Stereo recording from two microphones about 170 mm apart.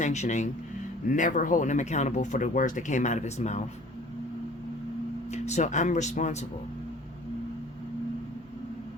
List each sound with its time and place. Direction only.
0.0 s speech: 45° left (ahead or behind)
5.3 s speech: 45° left (ahead or behind)